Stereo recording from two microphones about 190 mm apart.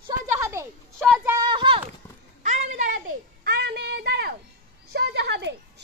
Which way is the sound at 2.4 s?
40° right (ahead or behind).